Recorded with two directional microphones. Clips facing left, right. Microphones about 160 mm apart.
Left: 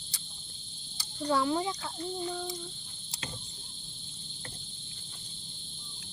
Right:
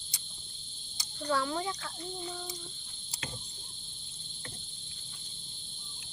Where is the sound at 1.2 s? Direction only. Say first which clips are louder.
Left 3 dB; 25° left (ahead or behind).